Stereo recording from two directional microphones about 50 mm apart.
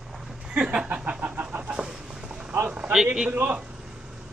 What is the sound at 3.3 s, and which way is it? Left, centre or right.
Speech, right.